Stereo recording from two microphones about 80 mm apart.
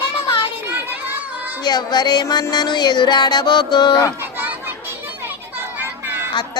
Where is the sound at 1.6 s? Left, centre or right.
Left.